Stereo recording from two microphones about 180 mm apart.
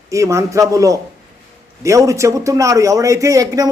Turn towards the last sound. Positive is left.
turn(degrees=-20)  # may be behind; listen again after turning